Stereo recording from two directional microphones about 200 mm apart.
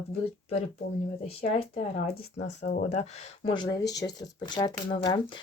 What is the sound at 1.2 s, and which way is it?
Speech, 30° left (ahead or behind).